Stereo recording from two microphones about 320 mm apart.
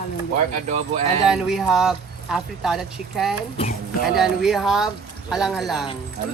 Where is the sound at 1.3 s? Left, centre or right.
Centre.